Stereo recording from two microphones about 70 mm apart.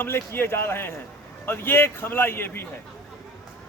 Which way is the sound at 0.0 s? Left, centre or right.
Left.